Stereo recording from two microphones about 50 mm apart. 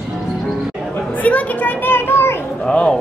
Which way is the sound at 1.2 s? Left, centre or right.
Left.